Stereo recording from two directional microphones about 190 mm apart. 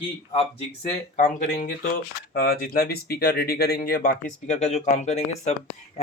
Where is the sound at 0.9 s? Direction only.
40° left (ahead or behind).